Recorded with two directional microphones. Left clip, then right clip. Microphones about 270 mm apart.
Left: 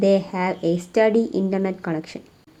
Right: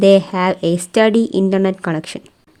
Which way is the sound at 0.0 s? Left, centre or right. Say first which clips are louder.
Right 8 dB; right.